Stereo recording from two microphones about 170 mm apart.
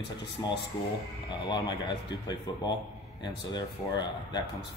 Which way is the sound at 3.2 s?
25° left (ahead or behind).